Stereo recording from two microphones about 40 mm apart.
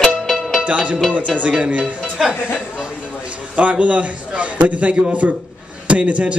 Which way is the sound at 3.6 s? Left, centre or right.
Right.